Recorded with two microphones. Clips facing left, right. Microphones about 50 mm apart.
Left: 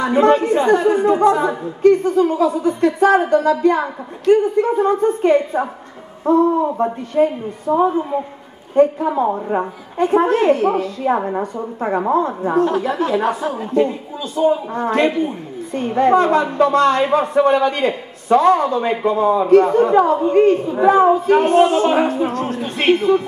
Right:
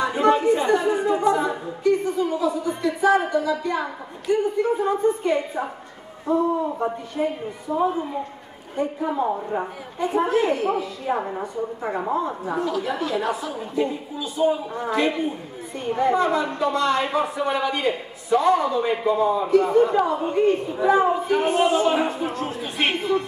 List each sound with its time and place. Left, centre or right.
0.0 s a man's voice: left
13.0 s speech: left
13.4 s a man's voice: left